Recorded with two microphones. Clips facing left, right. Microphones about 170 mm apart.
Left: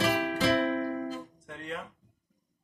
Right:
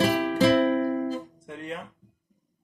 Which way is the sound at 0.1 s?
30° right (ahead or behind).